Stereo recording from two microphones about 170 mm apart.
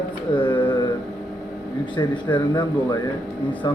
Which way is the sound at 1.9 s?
25° left (ahead or behind).